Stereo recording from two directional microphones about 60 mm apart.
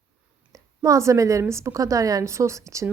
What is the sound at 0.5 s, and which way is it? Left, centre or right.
Speech, right.